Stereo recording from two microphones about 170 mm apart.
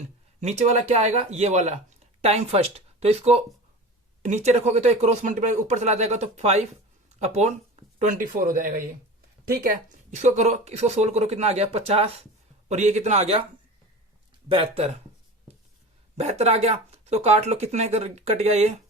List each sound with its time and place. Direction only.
0.3 s speech: 40° right (ahead or behind)
14.5 s speech: 30° right (ahead or behind)
16.1 s speech: 40° right (ahead or behind)